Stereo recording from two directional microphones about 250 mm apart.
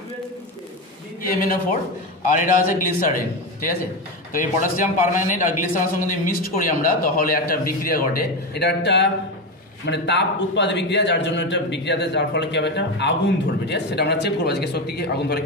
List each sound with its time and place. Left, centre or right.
1.2 s a man's voice: left